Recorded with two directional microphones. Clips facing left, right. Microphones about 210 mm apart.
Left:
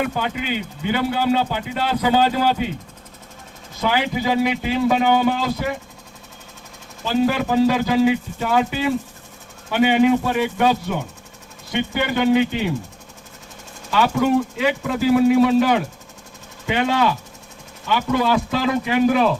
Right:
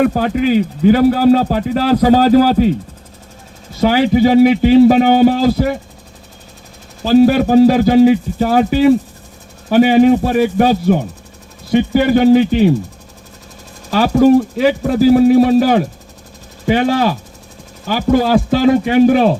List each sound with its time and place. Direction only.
0.0 s speech: 40° right (ahead or behind)
3.8 s speech: 35° right (ahead or behind)
7.0 s speech: 35° right (ahead or behind)
13.9 s speech: 35° right (ahead or behind)